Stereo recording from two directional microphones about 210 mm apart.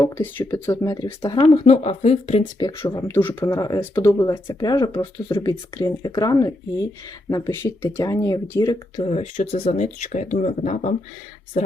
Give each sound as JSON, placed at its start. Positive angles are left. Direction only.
{"t": 0.0, "sound": "speech", "side_deg": 10}
{"t": 1.4, "sound": "speech", "side_deg": 25}
{"t": 9.0, "sound": "speech", "side_deg": 30}